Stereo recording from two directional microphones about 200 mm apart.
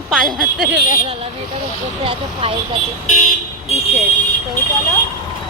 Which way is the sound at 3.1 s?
35° left (ahead or behind).